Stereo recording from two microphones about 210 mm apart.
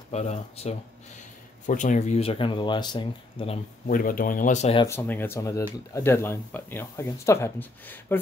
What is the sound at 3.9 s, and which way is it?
Speech, 40° left (ahead or behind).